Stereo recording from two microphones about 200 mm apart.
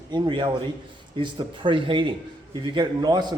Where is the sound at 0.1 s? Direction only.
25° right (ahead or behind).